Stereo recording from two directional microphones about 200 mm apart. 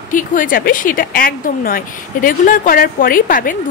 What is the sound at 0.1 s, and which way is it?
A woman's voice, 40° left (ahead or behind).